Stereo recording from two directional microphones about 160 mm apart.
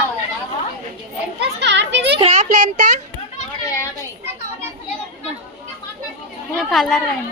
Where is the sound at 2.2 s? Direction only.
45° right (ahead or behind).